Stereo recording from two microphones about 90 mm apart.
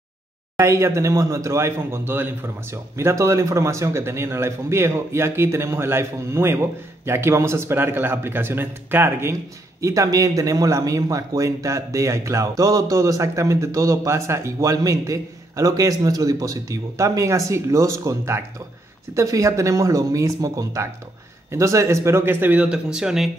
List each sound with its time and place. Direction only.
0.6 s speech: 30° right (ahead or behind)
9.8 s speech: 35° right (ahead or behind); by 23.3 s 5° right (ahead or behind)